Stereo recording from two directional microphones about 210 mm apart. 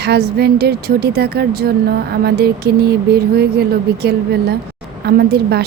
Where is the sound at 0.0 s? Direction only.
50° right (ahead or behind).